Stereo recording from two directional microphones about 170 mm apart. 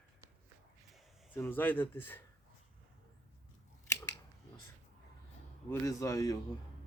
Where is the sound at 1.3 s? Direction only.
10° left (ahead or behind).